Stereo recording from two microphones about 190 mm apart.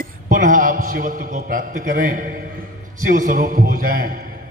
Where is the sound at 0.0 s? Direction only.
45° right (ahead or behind).